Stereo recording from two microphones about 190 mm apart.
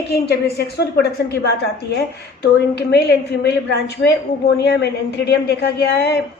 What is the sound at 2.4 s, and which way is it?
A woman's voice, 60° left (ahead or behind).